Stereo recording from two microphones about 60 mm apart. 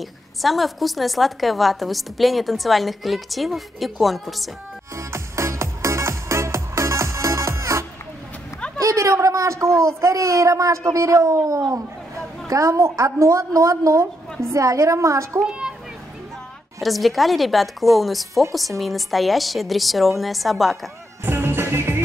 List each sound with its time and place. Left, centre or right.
0.4 s a woman's voice: centre
4.9 s music: right
8.7 s a sound: right
9.8 s a woman's voice: right
16.8 s a woman's voice: centre
21.3 s music: right